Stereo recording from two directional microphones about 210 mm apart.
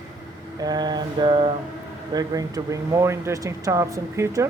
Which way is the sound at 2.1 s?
15° right (ahead or behind).